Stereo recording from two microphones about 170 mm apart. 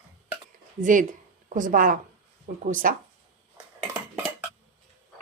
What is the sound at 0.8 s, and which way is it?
A woman's voice, 50° right (ahead or behind).